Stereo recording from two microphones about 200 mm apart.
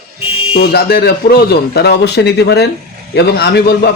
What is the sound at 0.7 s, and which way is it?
A man's voice, 55° left (ahead or behind).